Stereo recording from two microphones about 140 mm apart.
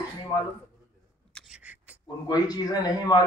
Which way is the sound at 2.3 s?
25° left (ahead or behind).